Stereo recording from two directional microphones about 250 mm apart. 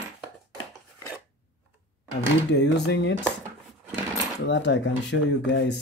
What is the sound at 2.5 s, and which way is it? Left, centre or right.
Speech, left.